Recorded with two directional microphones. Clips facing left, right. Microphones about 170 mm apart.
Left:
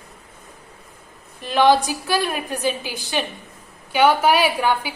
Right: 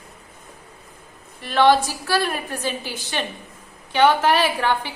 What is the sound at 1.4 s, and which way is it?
A woman's voice, 15° left (ahead or behind).